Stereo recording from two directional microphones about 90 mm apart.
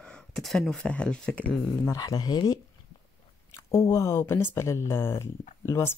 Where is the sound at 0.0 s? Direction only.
5° left (ahead or behind).